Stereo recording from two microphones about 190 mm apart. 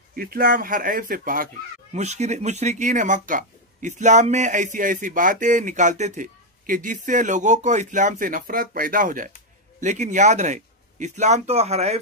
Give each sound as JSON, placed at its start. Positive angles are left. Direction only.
{"t": 0.1, "sound": "speech", "side_deg": -50}
{"t": 2.0, "sound": "speech", "side_deg": -35}